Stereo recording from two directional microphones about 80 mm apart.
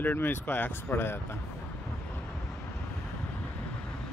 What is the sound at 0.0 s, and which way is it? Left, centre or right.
Speech, left.